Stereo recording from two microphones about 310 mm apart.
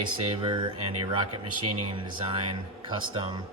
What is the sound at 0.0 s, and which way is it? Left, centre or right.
Speech, centre.